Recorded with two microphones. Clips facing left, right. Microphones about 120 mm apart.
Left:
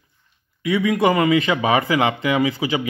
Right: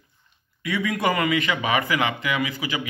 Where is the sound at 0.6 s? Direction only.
20° left (ahead or behind).